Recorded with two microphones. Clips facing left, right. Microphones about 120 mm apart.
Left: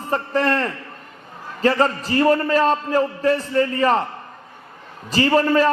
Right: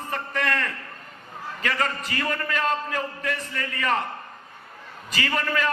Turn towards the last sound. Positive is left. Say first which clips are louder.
# left 10 dB
turn(degrees=35)  # may be behind; listen again after turning